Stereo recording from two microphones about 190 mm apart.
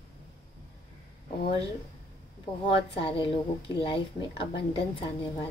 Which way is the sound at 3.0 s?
30° left (ahead or behind).